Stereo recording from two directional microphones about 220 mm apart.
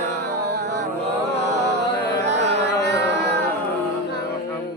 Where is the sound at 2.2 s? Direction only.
30° right (ahead or behind).